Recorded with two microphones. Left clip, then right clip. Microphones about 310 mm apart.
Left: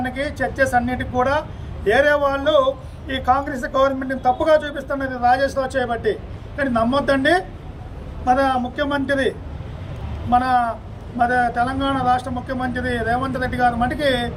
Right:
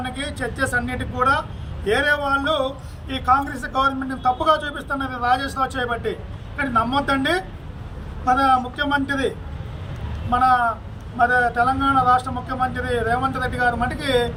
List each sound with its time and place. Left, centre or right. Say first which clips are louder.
0.0 s a man's voice: left 4 dB; centre
10.3 s a man's voice: even; centre